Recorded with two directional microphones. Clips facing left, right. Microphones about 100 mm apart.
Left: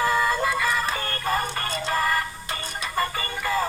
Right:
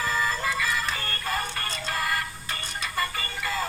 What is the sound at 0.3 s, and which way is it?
Music, 50° left (ahead or behind).